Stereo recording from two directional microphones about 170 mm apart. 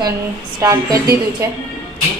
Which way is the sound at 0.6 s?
20° right (ahead or behind).